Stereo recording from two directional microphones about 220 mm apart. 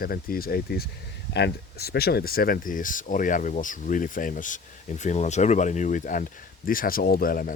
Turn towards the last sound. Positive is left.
turn(degrees=40)  # may be behind; listen again after turning